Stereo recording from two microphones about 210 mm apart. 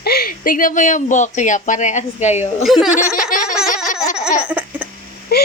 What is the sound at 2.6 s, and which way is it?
Speech, centre (ahead or behind).